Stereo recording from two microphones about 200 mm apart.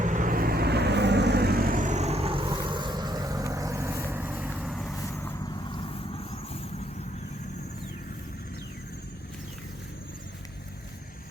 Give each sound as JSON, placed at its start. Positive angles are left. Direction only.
{"t": 0.0, "sound": "vehicle", "side_deg": -40}
{"t": 4.9, "sound": "vehicle", "side_deg": 15}